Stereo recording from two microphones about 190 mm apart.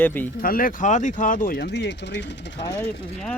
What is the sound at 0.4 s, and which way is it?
Speech, 50° left (ahead or behind).